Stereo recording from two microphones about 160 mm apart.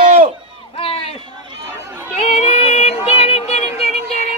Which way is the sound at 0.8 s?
35° left (ahead or behind).